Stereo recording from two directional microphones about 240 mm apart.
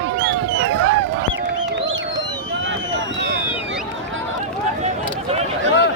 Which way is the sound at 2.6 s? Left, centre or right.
Right.